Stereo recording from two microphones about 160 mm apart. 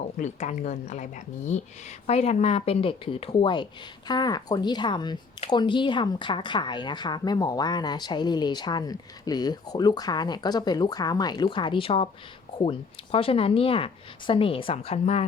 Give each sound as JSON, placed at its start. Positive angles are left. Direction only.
{"t": 0.2, "sound": "a woman's voice", "side_deg": 45}